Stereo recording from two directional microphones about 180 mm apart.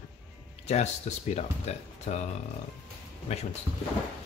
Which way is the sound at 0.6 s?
40° left (ahead or behind).